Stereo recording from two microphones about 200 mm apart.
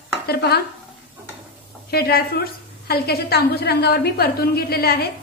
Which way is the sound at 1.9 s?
50° left (ahead or behind).